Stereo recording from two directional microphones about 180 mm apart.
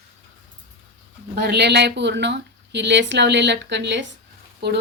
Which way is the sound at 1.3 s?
65° right (ahead or behind).